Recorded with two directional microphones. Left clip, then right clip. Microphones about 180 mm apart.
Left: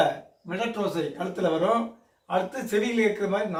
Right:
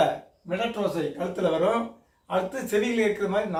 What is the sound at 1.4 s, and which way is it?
Speech, 15° right (ahead or behind).